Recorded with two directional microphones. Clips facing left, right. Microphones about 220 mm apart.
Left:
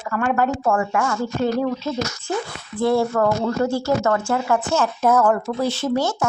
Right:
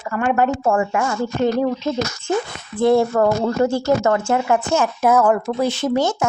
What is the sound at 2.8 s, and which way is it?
Speech, 20° right (ahead or behind).